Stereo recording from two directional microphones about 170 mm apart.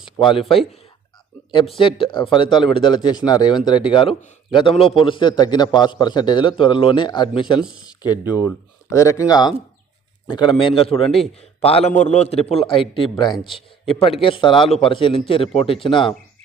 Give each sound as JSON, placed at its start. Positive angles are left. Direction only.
{"t": 1.8, "sound": "a man's voice", "side_deg": 30}